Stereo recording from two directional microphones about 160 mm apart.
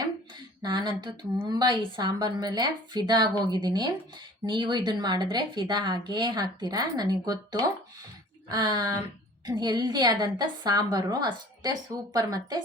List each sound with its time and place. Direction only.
0.6 s speech: 30° right (ahead or behind)